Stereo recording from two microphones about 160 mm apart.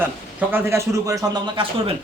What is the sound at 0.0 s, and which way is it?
Speech, 15° right (ahead or behind).